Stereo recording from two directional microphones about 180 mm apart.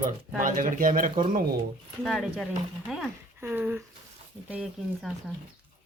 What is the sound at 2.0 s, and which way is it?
Speech, centre (ahead or behind).